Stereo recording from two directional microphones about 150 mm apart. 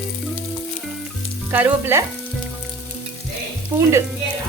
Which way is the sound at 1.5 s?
15° right (ahead or behind).